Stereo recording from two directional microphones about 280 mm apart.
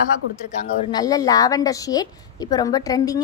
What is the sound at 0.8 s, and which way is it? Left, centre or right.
A woman's voice, centre.